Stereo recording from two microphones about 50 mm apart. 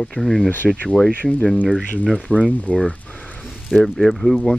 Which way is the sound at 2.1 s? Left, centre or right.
Left.